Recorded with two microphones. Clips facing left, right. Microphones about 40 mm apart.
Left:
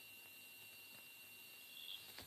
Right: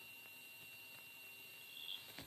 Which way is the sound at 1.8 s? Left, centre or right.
Right.